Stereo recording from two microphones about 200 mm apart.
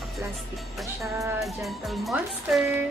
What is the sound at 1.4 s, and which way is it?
Speech, centre (ahead or behind).